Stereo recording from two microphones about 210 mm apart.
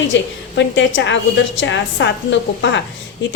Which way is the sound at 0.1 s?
60° left (ahead or behind).